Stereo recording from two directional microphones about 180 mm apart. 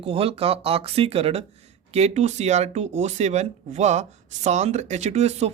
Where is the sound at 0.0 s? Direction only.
35° right (ahead or behind).